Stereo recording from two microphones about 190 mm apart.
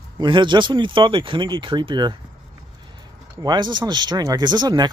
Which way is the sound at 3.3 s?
20° right (ahead or behind).